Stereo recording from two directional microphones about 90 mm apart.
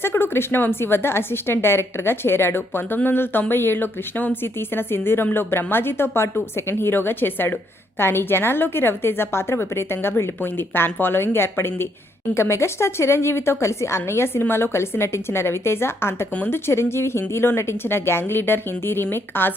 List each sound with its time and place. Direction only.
0.0 s speech: 25° left (ahead or behind)